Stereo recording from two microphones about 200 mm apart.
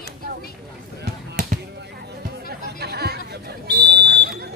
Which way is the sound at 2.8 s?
55° right (ahead or behind).